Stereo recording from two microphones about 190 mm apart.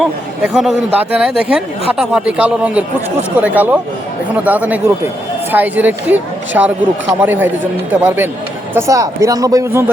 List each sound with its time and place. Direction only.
0.0 s speech: centre (ahead or behind); by 9.8 s 15° right (ahead or behind)